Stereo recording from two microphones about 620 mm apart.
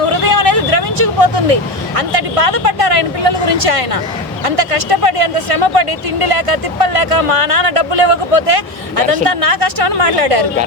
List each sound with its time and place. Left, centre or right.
0.0 s vehicle: right
2.0 s a sound: right
4.4 s speech: right